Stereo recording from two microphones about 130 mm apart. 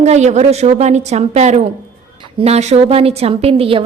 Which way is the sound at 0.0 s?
60° right (ahead or behind).